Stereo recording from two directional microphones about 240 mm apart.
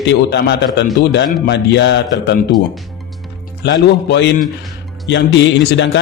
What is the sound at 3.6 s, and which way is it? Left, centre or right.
Speech, left.